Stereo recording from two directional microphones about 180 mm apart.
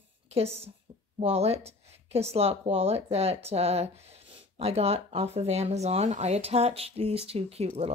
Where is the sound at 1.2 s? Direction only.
35° right (ahead or behind).